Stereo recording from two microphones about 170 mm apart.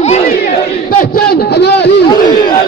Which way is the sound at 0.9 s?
70° left (ahead or behind).